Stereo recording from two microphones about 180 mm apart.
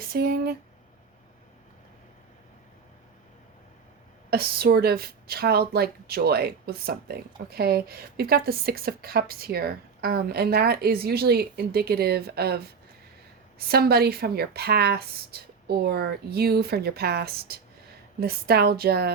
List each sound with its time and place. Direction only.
0.0 s speech: 60° right (ahead or behind)
4.3 s speech: 60° right (ahead or behind)